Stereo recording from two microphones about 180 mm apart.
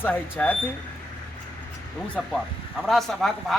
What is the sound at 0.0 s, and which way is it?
Speech, 10° left (ahead or behind).